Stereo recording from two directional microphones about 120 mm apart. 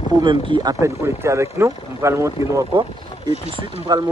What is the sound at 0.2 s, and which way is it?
Speech, 40° right (ahead or behind).